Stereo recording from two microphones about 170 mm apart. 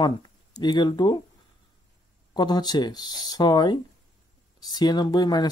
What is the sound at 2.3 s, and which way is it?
Speech, 25° left (ahead or behind).